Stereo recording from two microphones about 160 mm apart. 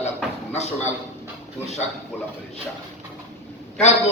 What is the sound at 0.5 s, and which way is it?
Speech, 45° left (ahead or behind).